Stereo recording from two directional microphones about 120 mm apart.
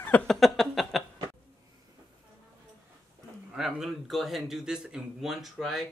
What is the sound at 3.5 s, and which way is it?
A man's voice, 5° right (ahead or behind).